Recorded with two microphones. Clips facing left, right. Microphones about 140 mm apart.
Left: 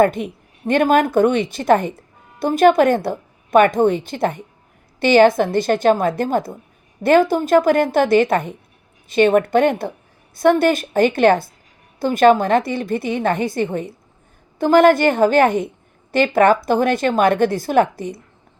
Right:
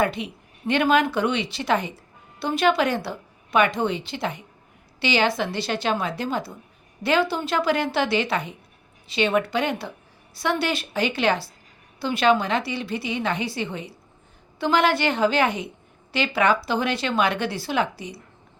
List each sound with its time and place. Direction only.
0.0 s a woman's voice: 50° left (ahead or behind)